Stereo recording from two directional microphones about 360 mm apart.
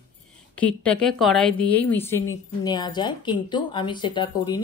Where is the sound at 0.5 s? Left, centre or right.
Centre.